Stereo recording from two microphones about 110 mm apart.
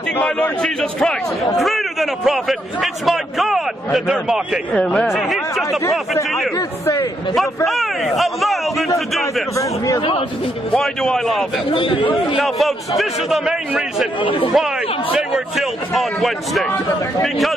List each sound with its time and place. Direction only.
0.2 s a man's voice: 10° left (ahead or behind)
4.7 s a man's voice: 10° left (ahead or behind)
7.3 s a man's voice: centre (ahead or behind)
10.7 s a man's voice: 5° left (ahead or behind)
11.7 s speech: 50° left (ahead or behind)
12.4 s a man's voice: centre (ahead or behind)
14.2 s speech: 55° left (ahead or behind)
15.1 s a man's voice: 5° right (ahead or behind)